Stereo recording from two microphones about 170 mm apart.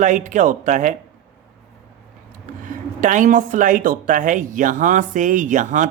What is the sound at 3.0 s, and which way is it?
Speech, 50° right (ahead or behind).